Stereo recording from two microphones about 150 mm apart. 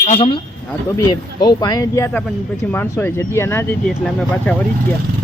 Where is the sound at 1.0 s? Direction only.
30° left (ahead or behind).